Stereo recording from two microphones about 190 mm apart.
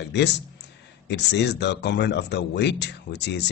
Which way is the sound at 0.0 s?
65° left (ahead or behind).